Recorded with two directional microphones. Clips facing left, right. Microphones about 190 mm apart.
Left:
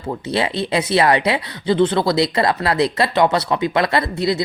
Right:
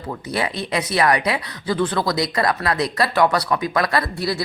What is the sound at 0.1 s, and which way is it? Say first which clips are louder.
Speech: left 4 dB; 25° left (ahead or behind).